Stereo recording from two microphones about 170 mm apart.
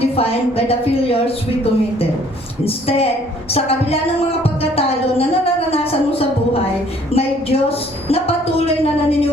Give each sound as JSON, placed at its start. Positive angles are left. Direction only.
{"t": 0.0, "sound": "a woman's voice", "side_deg": 35}
{"t": 2.6, "sound": "a woman's voice", "side_deg": 35}